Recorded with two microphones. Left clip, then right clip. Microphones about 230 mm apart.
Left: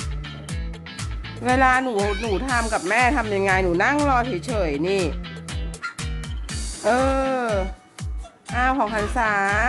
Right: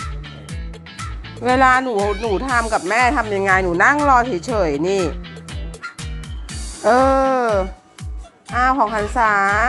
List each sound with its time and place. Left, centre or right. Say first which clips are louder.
0.3 s music: even; centre
1.4 s speech: right 4 dB; centre